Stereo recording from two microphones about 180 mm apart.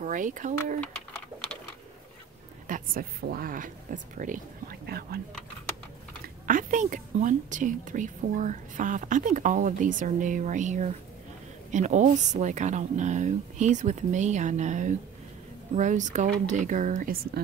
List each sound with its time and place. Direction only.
0.0 s speech: 45° right (ahead or behind)
2.7 s a woman's voice: 55° right (ahead or behind)
6.2 s speech: 50° right (ahead or behind)